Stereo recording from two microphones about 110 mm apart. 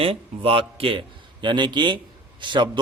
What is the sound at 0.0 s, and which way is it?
A man's voice, 60° right (ahead or behind).